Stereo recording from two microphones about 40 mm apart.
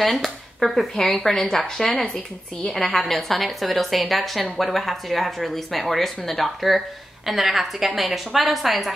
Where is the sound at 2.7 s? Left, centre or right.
Centre.